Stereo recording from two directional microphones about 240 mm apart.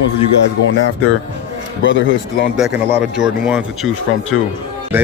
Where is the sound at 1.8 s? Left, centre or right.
Left.